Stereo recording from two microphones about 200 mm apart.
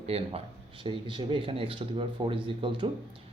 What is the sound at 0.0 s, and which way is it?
Speech, 30° right (ahead or behind).